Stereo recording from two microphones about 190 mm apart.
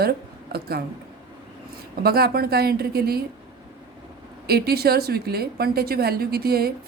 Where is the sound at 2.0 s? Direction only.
55° right (ahead or behind).